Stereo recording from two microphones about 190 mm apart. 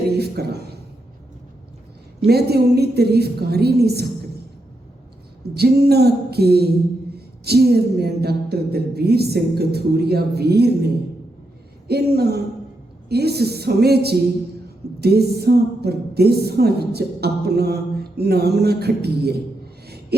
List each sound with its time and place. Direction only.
0.2 s a woman's voice: 55° right (ahead or behind)
2.2 s a woman's voice: 55° right (ahead or behind)
5.5 s a woman's voice: 55° right (ahead or behind)